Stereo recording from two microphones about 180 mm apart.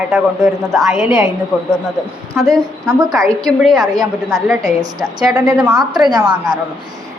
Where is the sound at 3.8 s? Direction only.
20° right (ahead or behind).